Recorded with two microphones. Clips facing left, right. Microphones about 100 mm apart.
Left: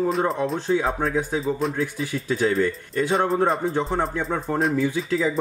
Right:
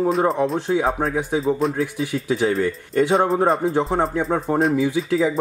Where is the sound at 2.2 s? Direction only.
10° right (ahead or behind).